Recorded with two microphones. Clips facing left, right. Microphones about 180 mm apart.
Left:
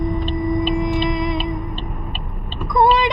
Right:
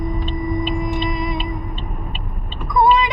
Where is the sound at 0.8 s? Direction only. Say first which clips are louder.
Left 3 dB; 5° right (ahead or behind).